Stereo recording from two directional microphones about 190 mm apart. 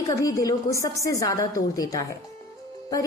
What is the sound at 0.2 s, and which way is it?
A woman's voice, 20° left (ahead or behind).